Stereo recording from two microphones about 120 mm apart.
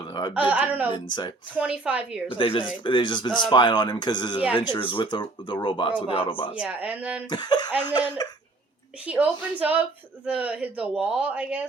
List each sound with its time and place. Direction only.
0.1 s a sound: 40° left (ahead or behind)
0.3 s speech: 10° right (ahead or behind)
2.3 s speech: 45° left (ahead or behind)
6.6 s speech: 10° right (ahead or behind)
7.3 s speech: 35° left (ahead or behind)
9.0 s speech: 10° right (ahead or behind)